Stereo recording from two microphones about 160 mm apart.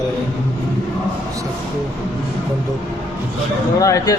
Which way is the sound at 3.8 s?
20° left (ahead or behind).